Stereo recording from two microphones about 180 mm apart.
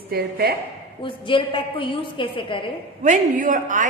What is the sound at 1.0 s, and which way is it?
A woman's voice, 30° left (ahead or behind).